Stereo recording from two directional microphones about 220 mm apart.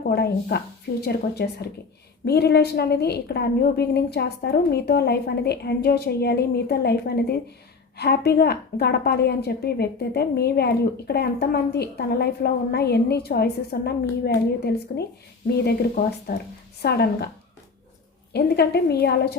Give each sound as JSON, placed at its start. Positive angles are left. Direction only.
{"t": 0.0, "sound": "a woman's voice", "side_deg": 45}
{"t": 18.3, "sound": "a woman's voice", "side_deg": 45}